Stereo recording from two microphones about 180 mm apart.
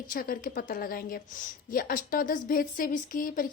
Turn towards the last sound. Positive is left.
turn(degrees=50)  # may be behind; listen again after turning